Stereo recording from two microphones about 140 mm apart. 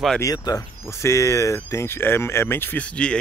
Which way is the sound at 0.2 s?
25° left (ahead or behind).